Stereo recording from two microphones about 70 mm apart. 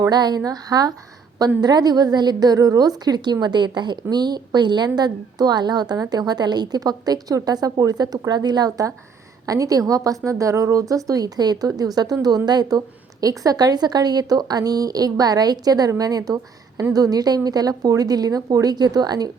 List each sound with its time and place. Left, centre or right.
0.1 s a woman's voice: right
1.6 s a woman's voice: right
3.4 s a woman's voice: right
4.9 s a woman's voice: right
8.3 s speech: right
9.5 s speech: right
12.5 s speech: right
13.2 s a woman's voice: right